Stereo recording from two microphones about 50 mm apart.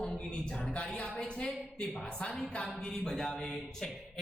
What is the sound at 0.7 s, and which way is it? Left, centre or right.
A woman's voice, left.